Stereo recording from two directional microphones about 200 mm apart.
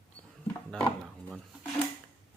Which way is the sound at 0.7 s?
5° left (ahead or behind).